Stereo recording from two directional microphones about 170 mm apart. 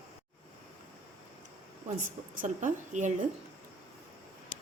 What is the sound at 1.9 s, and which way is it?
A woman's voice, 50° right (ahead or behind).